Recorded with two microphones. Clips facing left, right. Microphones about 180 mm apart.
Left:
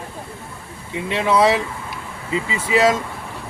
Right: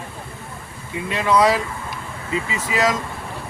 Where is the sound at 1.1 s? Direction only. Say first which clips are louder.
Left 1 dB; 25° left (ahead or behind).